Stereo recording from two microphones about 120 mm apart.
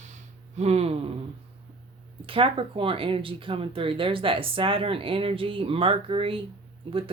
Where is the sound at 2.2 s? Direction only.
50° right (ahead or behind).